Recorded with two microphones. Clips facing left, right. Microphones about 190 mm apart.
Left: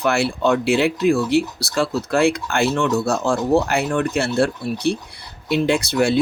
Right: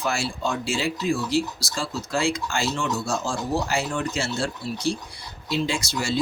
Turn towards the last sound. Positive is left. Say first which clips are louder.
# left 9 dB
turn(degrees=60)  # may be behind; listen again after turning